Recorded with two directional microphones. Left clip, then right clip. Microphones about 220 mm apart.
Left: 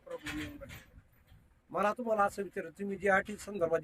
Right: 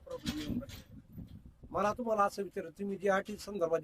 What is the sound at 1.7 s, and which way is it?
Speech, centre (ahead or behind).